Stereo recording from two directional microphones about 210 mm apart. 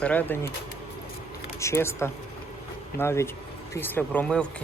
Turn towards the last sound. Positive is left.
turn(degrees=5)  # may be behind; listen again after turning